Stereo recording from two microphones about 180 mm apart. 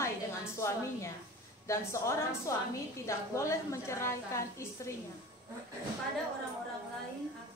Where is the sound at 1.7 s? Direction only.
15° left (ahead or behind).